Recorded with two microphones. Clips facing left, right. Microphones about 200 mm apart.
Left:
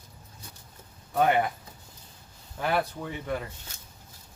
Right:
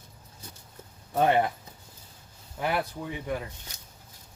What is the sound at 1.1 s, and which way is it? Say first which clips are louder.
Speech: even; 30° right (ahead or behind).